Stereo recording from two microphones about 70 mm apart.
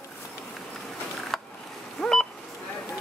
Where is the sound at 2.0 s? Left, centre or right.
Centre.